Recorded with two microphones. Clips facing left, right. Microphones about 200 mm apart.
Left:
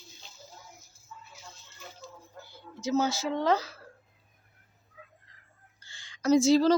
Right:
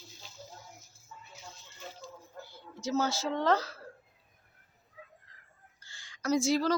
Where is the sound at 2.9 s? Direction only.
15° left (ahead or behind).